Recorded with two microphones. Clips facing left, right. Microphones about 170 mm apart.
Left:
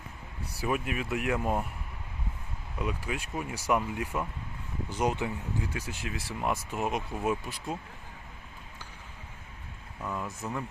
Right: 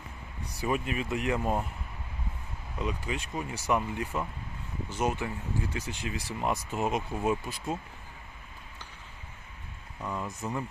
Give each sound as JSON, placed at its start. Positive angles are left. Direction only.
{"t": 0.6, "sound": "speech", "side_deg": 5}
{"t": 2.7, "sound": "speech", "side_deg": 5}
{"t": 5.7, "sound": "speech", "side_deg": 5}
{"t": 10.0, "sound": "speech", "side_deg": 0}